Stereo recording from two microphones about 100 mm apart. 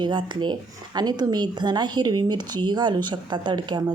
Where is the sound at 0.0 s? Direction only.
50° right (ahead or behind).